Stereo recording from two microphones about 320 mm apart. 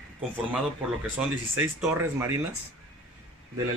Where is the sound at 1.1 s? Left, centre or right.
Centre.